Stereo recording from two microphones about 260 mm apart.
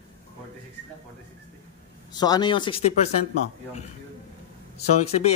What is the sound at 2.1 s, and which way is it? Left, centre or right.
Speech, centre.